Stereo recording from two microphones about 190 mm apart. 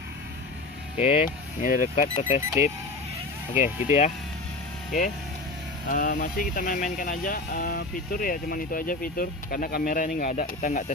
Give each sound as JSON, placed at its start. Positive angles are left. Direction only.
{"t": 0.9, "sound": "speech", "side_deg": 40}
{"t": 3.8, "sound": "speech", "side_deg": 35}
{"t": 5.9, "sound": "speech", "side_deg": 45}